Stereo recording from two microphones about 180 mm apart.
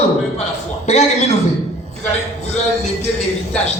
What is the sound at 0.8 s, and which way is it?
Speech, 35° left (ahead or behind).